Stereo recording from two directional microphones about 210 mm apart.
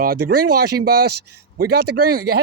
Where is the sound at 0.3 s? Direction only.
50° right (ahead or behind).